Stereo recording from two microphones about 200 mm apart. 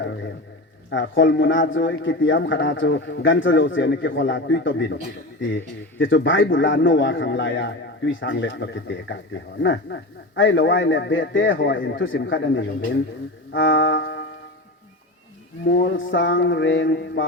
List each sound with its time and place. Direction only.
0.9 s a man's voice: 60° left (ahead or behind)
6.0 s a man's voice: 70° left (ahead or behind)
13.5 s music: 70° left (ahead or behind)
15.6 s speech: 55° left (ahead or behind); by 17.2 s 70° left (ahead or behind)